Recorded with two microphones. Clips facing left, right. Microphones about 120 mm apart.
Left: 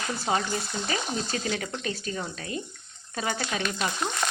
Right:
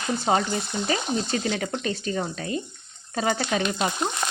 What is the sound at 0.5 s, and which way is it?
Speech, 25° right (ahead or behind).